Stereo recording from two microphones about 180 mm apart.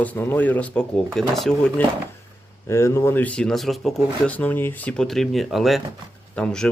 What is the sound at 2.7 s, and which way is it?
Speech, 15° left (ahead or behind).